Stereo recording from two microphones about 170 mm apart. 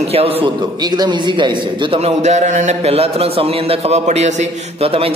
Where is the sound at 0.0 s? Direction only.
35° right (ahead or behind).